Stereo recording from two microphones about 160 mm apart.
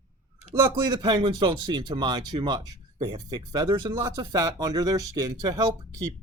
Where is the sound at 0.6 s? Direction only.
25° right (ahead or behind).